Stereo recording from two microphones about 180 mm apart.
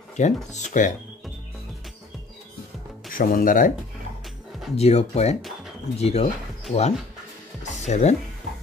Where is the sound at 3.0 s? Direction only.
50° left (ahead or behind).